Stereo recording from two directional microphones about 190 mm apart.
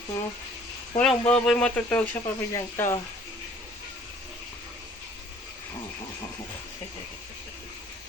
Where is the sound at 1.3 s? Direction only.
5° left (ahead or behind).